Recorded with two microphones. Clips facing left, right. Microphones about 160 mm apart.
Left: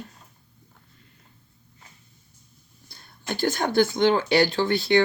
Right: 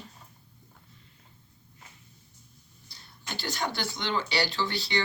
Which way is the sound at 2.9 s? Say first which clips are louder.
Left 8 dB; 50° left (ahead or behind).